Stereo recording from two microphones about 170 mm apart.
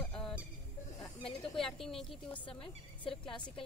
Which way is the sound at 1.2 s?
30° left (ahead or behind).